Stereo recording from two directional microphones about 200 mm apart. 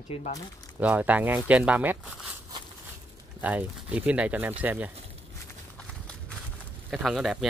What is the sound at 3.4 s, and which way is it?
Speech, 5° right (ahead or behind).